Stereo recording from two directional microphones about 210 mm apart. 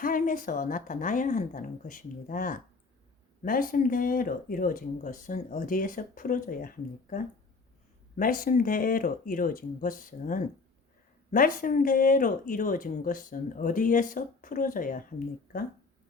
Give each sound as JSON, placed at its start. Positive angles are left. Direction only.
{"t": 0.0, "sound": "speech", "side_deg": 40}